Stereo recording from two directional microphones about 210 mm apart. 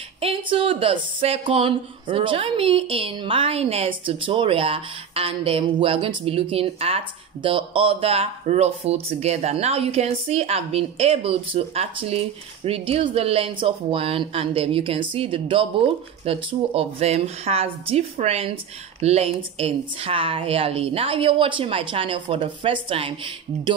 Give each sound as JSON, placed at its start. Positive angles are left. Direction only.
{"t": 0.2, "sound": "speech", "side_deg": -25}